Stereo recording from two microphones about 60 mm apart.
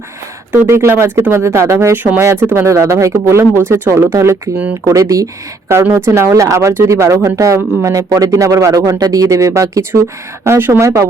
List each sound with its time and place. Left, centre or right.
0.5 s speech: right
2.6 s speech: right
4.9 s speech: right
5.7 s speech: right
6.1 s speech: right